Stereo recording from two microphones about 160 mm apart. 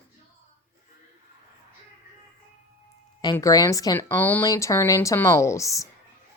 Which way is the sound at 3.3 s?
20° left (ahead or behind).